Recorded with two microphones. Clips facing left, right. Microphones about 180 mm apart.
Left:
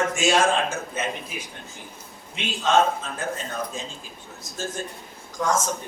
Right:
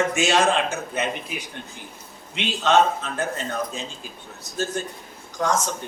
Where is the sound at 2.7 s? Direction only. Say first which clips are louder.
Right 2 dB; 70° right (ahead or behind).